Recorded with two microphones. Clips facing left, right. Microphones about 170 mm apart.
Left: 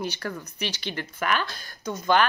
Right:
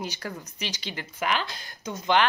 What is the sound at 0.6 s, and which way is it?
Speech, 60° left (ahead or behind).